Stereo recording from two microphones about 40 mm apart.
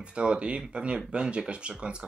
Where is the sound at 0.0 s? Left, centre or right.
Right.